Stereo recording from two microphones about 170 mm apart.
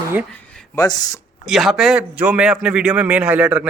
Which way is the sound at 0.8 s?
20° left (ahead or behind).